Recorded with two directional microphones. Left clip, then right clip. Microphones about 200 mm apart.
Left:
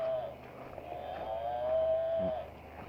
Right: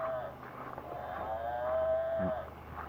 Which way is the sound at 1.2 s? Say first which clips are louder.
Left 1 dB; 30° right (ahead or behind).